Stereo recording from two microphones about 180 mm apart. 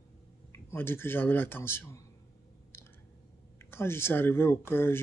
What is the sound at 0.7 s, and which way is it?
Speech, 15° left (ahead or behind).